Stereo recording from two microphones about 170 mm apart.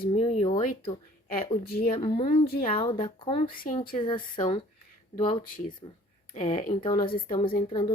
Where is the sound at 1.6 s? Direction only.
60° left (ahead or behind).